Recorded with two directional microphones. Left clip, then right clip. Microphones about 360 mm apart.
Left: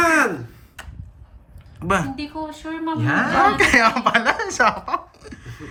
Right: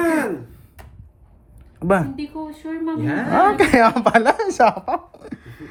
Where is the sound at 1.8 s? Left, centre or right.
Centre.